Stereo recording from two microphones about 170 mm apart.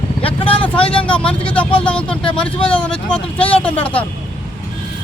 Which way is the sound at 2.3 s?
5° left (ahead or behind).